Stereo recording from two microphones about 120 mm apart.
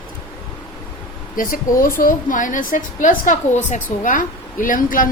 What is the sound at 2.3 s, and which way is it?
A woman's voice, 90° left.